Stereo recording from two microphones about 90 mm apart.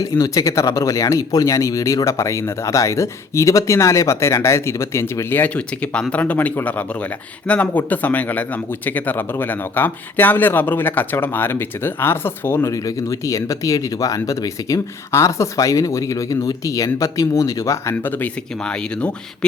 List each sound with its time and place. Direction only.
0.0 s speech: 40° left (ahead or behind)
12.7 s speech: 40° left (ahead or behind)
17.9 s speech: 20° left (ahead or behind)
18.6 s speech: 10° left (ahead or behind)